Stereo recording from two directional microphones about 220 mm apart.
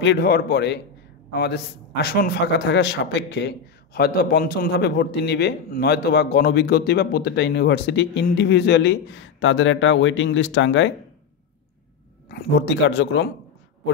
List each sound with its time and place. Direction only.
0.0 s a man's voice: 50° left (ahead or behind)
12.3 s a man's voice: 45° left (ahead or behind)